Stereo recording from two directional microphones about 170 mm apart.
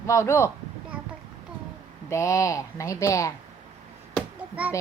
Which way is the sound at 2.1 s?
15° left (ahead or behind).